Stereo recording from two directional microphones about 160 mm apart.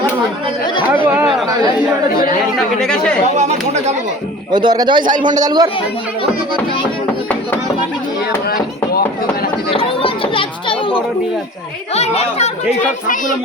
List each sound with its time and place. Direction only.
1.0 s speech: 10° right (ahead or behind)
2.6 s speech: 5° left (ahead or behind)
3.3 s speech: 45° right (ahead or behind)
4.5 s a man's voice: 25° right (ahead or behind)
9.6 s a child's voice: 35° left (ahead or behind)